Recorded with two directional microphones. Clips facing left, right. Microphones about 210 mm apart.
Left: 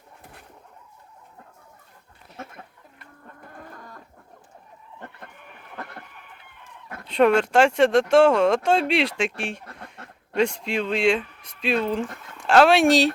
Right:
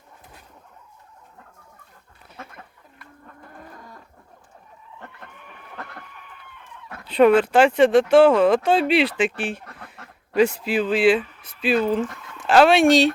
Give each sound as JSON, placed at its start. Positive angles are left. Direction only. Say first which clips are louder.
{"t": 7.0, "sound": "speech", "louder": "right 3 dB", "side_deg": 0}